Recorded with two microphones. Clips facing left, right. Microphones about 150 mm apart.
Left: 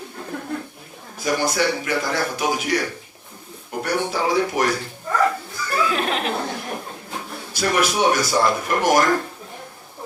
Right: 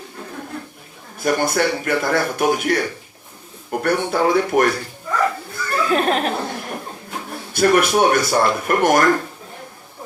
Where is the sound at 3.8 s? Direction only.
55° right (ahead or behind).